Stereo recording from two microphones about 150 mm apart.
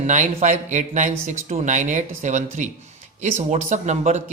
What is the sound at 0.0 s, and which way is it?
Speech, 55° right (ahead or behind).